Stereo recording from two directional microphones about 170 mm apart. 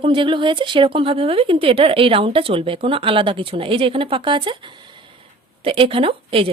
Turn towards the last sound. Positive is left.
turn(degrees=-35)  # may be behind; listen again after turning